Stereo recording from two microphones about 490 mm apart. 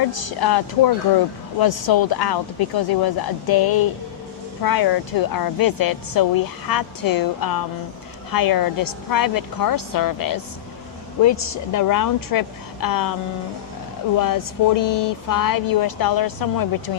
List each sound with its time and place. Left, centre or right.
0.1 s speech: left
1.6 s speech: left
14.2 s speech: left